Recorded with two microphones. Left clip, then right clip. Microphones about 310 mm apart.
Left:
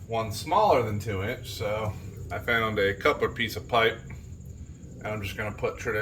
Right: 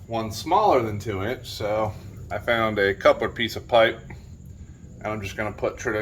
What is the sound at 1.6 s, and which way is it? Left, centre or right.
Speech, centre.